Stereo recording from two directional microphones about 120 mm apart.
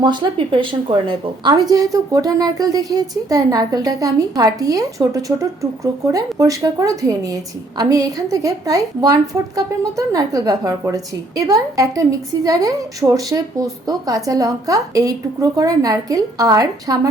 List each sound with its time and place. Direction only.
0.0 s a woman's voice: 40° right (ahead or behind)
1.7 s a woman's voice: 30° right (ahead or behind)